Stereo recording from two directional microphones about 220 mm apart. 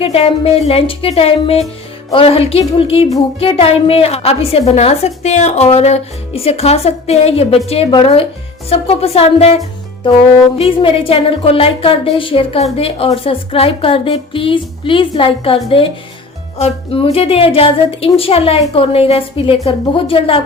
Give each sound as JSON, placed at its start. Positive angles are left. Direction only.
{"t": 0.0, "sound": "speech", "side_deg": 25}
{"t": 10.6, "sound": "speech", "side_deg": 25}